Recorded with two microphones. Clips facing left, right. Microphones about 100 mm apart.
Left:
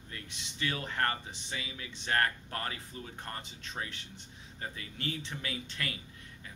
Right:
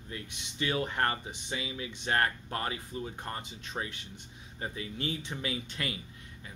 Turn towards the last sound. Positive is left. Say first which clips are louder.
# right 3 dB
turn(degrees=-15)  # may be behind; listen again after turning